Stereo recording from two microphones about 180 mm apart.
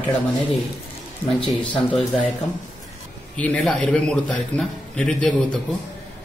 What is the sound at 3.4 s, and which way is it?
A man's voice, 5° left (ahead or behind).